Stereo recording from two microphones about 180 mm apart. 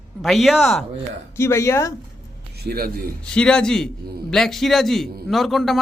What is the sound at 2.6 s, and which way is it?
Speech, 60° right (ahead or behind).